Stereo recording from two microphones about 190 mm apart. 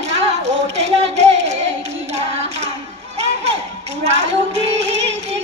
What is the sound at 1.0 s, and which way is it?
Hands, 35° right (ahead or behind).